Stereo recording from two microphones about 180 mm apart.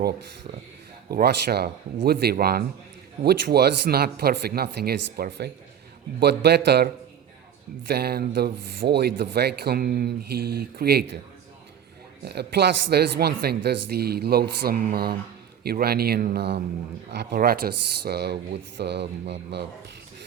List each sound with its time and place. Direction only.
1.1 s speech: 60° right (ahead or behind)
7.9 s speech: 60° right (ahead or behind)
12.2 s speech: 65° right (ahead or behind)